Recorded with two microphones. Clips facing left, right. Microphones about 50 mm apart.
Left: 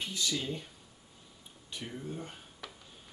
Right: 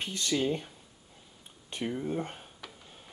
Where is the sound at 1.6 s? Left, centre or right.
Right.